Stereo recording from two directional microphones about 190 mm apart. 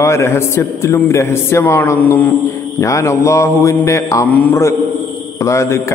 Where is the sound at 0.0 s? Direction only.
15° left (ahead or behind).